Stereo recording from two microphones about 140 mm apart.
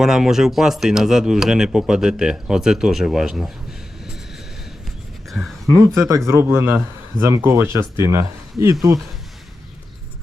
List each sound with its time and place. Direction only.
0.0 s speech: 5° right (ahead or behind)
5.3 s a sound: centre (ahead or behind)
5.8 s speech: 20° right (ahead or behind)